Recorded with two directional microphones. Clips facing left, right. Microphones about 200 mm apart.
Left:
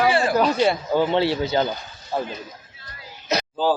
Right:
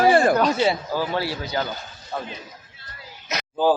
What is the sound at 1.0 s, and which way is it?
Speech, 25° left (ahead or behind).